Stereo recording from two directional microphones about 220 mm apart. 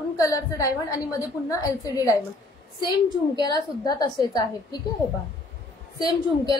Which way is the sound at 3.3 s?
20° left (ahead or behind).